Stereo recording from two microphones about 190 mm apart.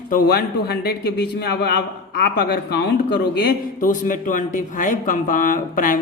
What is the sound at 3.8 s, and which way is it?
Speech, 45° left (ahead or behind).